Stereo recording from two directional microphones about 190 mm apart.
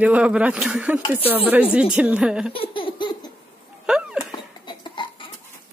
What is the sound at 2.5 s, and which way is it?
Baby laughter, 25° left (ahead or behind).